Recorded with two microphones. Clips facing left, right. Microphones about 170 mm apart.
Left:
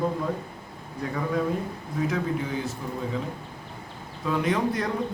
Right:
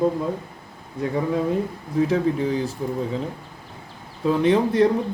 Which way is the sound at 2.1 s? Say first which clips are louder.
Right 7 dB; 35° right (ahead or behind).